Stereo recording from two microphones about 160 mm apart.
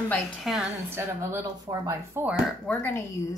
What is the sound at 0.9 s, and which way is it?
Speech, 20° right (ahead or behind).